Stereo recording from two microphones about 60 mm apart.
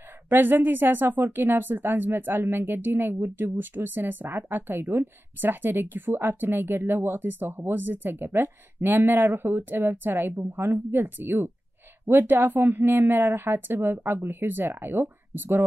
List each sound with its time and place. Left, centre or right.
0.3 s speech: right